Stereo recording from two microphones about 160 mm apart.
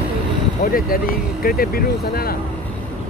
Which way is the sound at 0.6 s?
65° left (ahead or behind).